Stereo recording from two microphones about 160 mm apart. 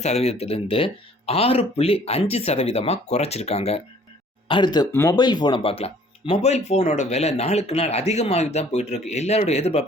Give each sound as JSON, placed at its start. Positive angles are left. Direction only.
{"t": 0.0, "sound": "speech", "side_deg": 40}
{"t": 4.4, "sound": "speech", "side_deg": 30}
{"t": 4.9, "sound": "speech", "side_deg": 15}
{"t": 5.1, "sound": "speech", "side_deg": 25}